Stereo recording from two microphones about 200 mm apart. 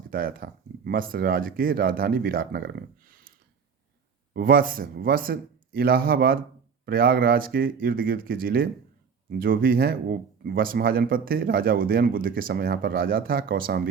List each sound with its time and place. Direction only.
0.1 s speech: 45° right (ahead or behind)
4.4 s speech: 45° right (ahead or behind)